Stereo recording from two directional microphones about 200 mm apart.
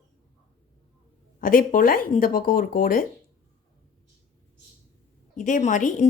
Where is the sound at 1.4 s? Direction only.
45° left (ahead or behind).